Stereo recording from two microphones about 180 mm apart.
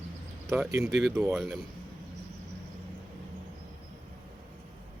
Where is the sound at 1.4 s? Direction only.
Centre (ahead or behind).